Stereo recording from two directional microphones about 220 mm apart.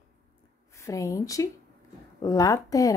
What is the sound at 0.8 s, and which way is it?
A woman's voice, 15° left (ahead or behind).